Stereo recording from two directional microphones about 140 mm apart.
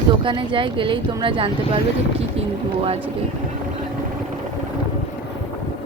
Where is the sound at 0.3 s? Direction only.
35° right (ahead or behind).